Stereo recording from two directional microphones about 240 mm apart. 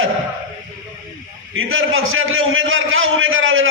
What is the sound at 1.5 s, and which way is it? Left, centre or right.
A man's voice, right.